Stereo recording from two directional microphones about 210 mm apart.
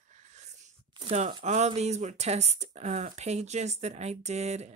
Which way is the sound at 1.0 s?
30° right (ahead or behind).